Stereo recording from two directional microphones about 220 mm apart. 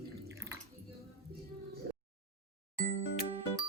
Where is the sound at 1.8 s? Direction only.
45° right (ahead or behind).